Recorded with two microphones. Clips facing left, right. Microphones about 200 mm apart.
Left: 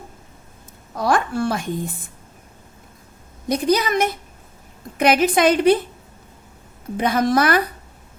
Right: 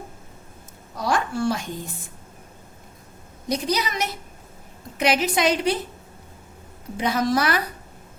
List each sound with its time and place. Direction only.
0.9 s a sound: 55° left (ahead or behind)
3.5 s a woman's voice: 50° left (ahead or behind)
6.9 s a woman's voice: 55° left (ahead or behind)